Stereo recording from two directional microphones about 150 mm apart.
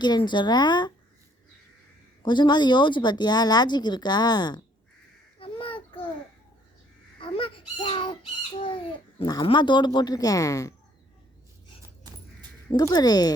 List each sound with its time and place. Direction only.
0.0 s speech: 30° left (ahead or behind)
2.2 s speech: 30° left (ahead or behind)
5.4 s a sound: 35° left (ahead or behind)
7.2 s speech: 35° left (ahead or behind)
12.7 s speech: 25° left (ahead or behind)